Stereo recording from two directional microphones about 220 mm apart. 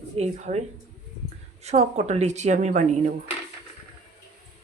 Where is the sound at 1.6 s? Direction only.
30° right (ahead or behind).